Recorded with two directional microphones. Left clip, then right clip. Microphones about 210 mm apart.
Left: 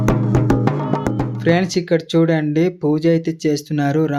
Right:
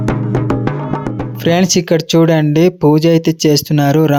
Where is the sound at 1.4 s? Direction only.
35° right (ahead or behind).